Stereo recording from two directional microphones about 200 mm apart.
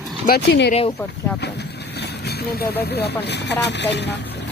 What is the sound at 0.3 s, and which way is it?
Speech, 55° left (ahead or behind).